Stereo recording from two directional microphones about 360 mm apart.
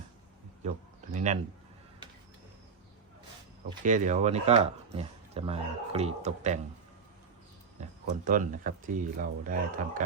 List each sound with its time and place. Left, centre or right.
1.1 s speech: centre
3.8 s speech: centre
7.8 s speech: right